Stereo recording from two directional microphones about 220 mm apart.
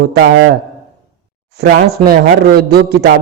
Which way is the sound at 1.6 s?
50° right (ahead or behind).